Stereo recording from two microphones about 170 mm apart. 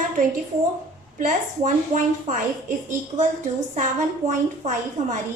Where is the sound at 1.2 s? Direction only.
50° right (ahead or behind).